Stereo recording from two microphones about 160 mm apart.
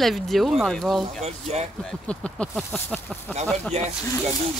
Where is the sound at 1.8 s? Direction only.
5° left (ahead or behind).